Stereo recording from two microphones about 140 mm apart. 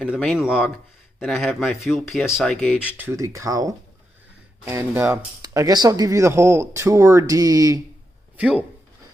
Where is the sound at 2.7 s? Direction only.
10° right (ahead or behind); by 7.8 s 25° right (ahead or behind).